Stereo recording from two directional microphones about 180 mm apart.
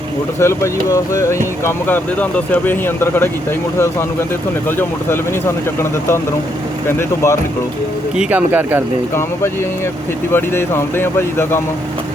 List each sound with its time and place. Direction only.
0.3 s speech: 15° left (ahead or behind)
4.8 s speech: 15° left (ahead or behind)
8.1 s speech: 5° right (ahead or behind)
10.3 s speech: 15° left (ahead or behind)